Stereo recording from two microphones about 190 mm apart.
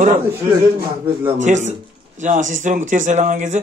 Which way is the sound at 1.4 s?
40° right (ahead or behind).